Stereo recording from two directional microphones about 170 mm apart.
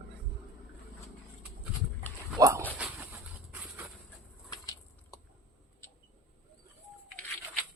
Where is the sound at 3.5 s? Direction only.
10° right (ahead or behind).